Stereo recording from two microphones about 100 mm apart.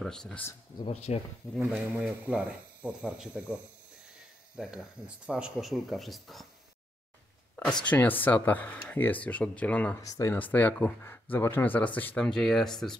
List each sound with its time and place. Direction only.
0.0 s speech: 5° left (ahead or behind)
0.8 s speech: 80° left
2.0 s speech: 10° right (ahead or behind)
7.8 s speech: 15° left (ahead or behind)
10.0 s speech: 35° left (ahead or behind)
10.3 s speech: 20° left (ahead or behind)
12.3 s speech: 5° left (ahead or behind)